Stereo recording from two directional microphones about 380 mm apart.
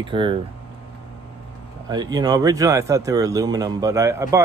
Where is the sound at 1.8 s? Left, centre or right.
Centre.